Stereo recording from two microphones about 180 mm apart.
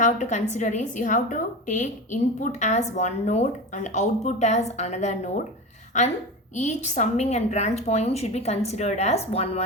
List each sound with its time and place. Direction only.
0.0 s a woman's voice: 40° left (ahead or behind)